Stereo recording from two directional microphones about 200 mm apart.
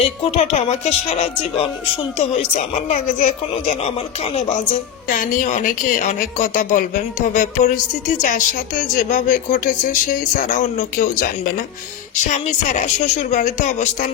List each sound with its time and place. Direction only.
0.0 s speech: 30° left (ahead or behind)
12.2 s speech: 35° left (ahead or behind)